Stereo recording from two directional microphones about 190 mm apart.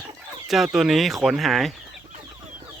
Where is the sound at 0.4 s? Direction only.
Centre (ahead or behind).